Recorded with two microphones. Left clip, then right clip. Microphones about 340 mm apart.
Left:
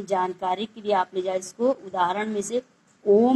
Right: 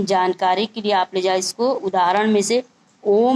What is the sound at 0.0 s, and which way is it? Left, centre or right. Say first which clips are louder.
A woman's voice: right 7 dB; right.